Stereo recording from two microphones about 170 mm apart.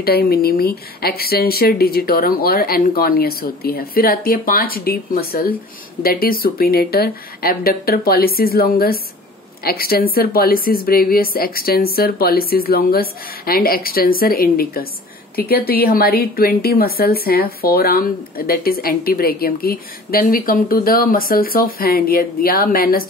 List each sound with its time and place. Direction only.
0.0 s a woman's voice: 65° left (ahead or behind)